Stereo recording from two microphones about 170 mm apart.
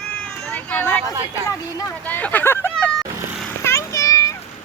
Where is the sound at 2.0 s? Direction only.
10° left (ahead or behind).